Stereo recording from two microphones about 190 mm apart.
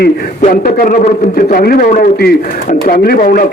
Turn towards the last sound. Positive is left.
turn(degrees=50)  # may be behind; listen again after turning